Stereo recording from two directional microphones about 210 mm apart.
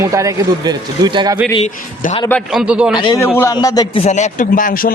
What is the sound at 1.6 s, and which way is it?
Speech, 35° left (ahead or behind).